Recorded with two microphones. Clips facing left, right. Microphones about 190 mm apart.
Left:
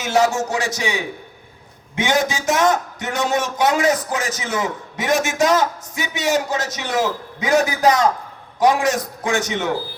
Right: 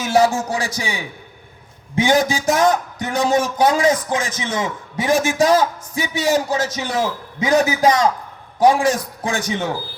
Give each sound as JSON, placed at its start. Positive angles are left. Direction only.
{"t": 0.0, "sound": "a man's voice", "side_deg": -30}